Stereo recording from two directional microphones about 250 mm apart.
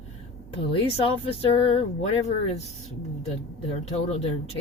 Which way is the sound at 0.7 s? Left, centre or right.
Left.